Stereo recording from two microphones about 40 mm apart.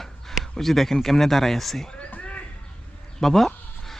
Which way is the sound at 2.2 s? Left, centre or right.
Left.